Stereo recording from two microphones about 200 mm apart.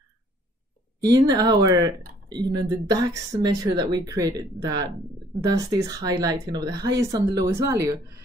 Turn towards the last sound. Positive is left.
turn(degrees=-15)  # may be behind; listen again after turning